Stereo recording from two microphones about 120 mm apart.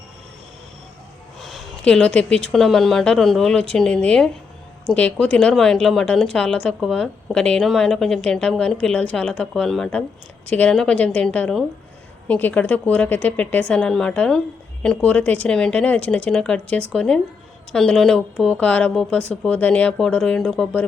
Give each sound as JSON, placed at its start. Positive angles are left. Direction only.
{"t": 1.4, "sound": "a woman's voice", "side_deg": 0}